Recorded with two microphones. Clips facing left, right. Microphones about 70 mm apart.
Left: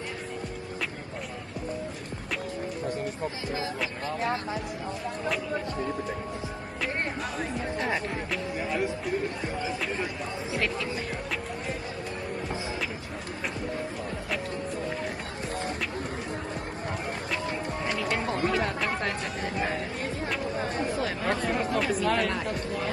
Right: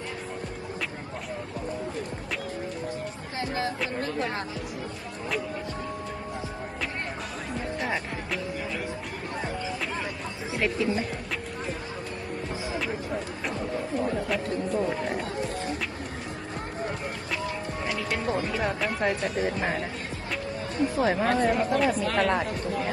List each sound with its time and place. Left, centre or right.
7.8 s music: centre
10.5 s music: centre
20.9 s speech: right
21.2 s speech: centre